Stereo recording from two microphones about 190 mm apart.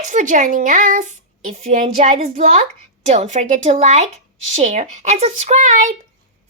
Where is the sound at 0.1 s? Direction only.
40° right (ahead or behind).